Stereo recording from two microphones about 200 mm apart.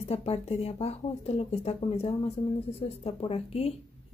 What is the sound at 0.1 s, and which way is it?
Speech, 30° left (ahead or behind).